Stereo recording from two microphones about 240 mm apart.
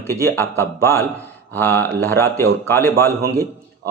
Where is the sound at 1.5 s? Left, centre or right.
Centre.